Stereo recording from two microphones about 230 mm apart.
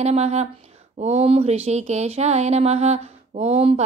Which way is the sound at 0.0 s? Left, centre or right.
Right.